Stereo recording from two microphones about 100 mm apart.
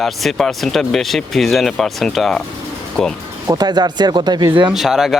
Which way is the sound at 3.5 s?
45° right (ahead or behind).